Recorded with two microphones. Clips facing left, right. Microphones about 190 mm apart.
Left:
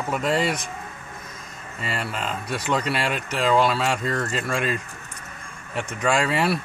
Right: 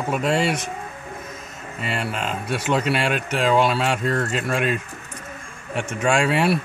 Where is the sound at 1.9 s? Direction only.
25° right (ahead or behind).